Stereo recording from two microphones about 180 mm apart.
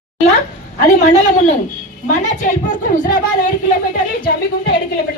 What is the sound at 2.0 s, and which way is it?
A woman's voice, 40° left (ahead or behind).